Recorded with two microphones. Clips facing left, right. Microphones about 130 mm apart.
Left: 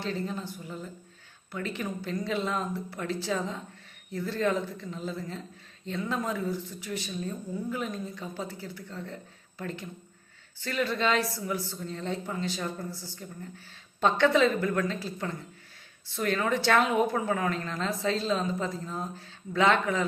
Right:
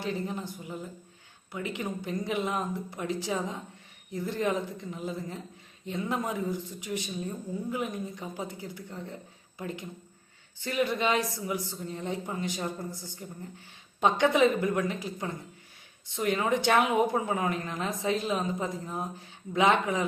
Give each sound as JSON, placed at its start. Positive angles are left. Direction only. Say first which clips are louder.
{"t": 0.0, "sound": "speech", "louder": "even", "side_deg": -15}